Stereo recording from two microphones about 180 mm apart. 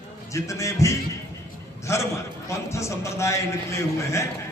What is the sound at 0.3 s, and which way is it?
A man's voice, 15° left (ahead or behind).